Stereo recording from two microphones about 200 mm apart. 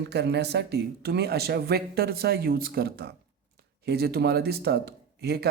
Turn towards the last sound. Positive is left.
turn(degrees=-55)  # may be behind; listen again after turning